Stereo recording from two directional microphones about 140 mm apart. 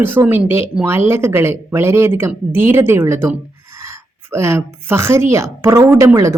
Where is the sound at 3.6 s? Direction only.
20° right (ahead or behind).